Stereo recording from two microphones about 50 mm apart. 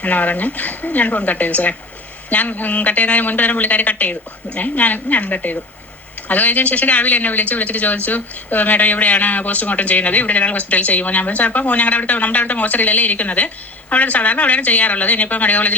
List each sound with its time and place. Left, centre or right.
0.0 s speech: left